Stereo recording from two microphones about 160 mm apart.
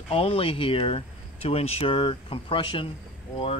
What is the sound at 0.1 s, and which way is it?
Speech, 35° left (ahead or behind).